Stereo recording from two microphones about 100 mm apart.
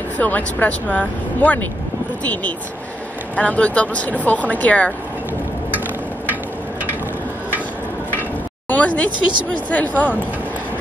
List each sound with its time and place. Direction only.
0.2 s speech: 15° left (ahead or behind)
3.3 s speech: 15° left (ahead or behind)
8.2 s a sound: 15° left (ahead or behind)
9.5 s speech: 15° left (ahead or behind)